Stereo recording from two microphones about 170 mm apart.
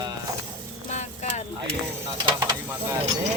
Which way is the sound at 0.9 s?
45° left (ahead or behind).